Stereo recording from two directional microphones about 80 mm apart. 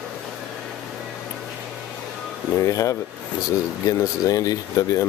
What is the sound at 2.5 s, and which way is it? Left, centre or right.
Speech, left.